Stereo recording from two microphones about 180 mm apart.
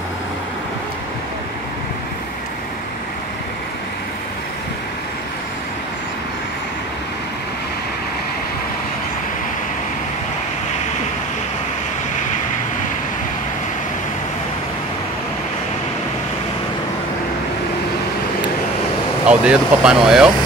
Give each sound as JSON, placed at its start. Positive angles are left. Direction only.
{"t": 19.2, "sound": "speech", "side_deg": -5}